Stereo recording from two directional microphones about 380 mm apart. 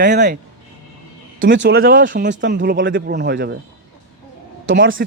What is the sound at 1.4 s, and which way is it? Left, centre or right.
Speech, right.